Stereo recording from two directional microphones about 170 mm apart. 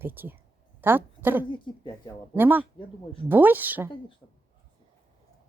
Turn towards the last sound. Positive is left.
turn(degrees=-10)  # may be behind; listen again after turning